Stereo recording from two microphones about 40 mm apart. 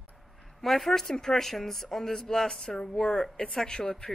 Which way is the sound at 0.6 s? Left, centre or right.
Centre.